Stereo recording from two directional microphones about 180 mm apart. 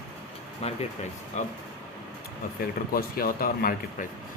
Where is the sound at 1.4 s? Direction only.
40° left (ahead or behind).